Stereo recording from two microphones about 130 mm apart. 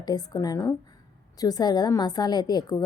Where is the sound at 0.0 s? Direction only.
30° left (ahead or behind).